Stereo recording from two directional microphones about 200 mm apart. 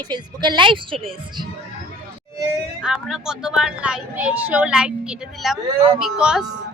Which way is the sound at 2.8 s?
5° right (ahead or behind).